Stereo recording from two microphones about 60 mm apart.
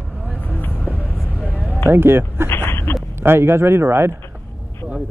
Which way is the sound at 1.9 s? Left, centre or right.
Right.